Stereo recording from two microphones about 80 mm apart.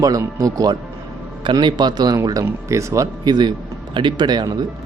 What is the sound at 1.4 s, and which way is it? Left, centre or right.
Speech, right.